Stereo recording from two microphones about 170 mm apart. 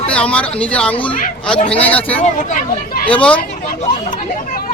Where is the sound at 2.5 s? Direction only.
55° left (ahead or behind).